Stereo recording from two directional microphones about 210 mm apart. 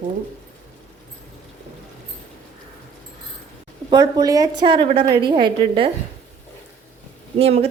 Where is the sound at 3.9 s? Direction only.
20° right (ahead or behind).